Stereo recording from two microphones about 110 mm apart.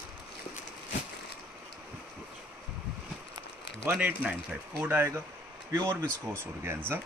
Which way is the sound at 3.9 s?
10° right (ahead or behind).